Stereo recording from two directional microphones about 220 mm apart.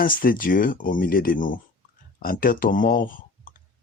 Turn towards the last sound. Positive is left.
turn(degrees=40)  # may be behind; listen again after turning